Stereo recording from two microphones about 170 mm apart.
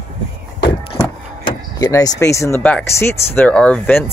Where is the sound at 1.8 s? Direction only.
20° left (ahead or behind).